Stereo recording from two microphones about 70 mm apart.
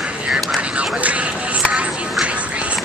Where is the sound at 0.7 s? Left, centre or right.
Centre.